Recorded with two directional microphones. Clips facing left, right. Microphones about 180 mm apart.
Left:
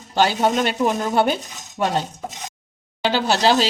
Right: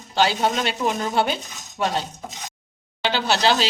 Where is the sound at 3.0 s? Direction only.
45° left (ahead or behind).